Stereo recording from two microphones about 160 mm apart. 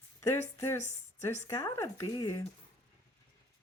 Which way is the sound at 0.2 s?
15° left (ahead or behind).